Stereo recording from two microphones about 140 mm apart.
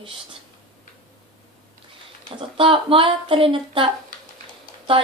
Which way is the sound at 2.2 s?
40° right (ahead or behind).